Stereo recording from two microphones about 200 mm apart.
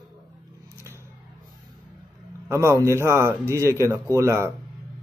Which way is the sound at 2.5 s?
15° right (ahead or behind).